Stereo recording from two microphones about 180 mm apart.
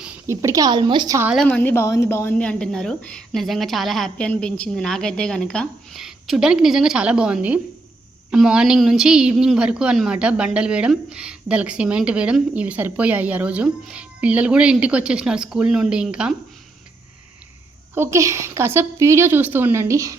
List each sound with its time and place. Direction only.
0.0 s a woman's voice: 10° right (ahead or behind)
1.3 s a woman's voice: 5° left (ahead or behind)
17.9 s a woman's voice: 15° right (ahead or behind)